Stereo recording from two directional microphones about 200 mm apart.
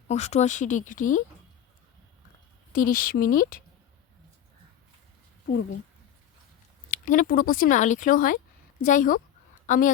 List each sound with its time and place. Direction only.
0.1 s speech: 35° left (ahead or behind)
2.7 s speech: 45° left (ahead or behind)
6.9 s speech: 40° left (ahead or behind)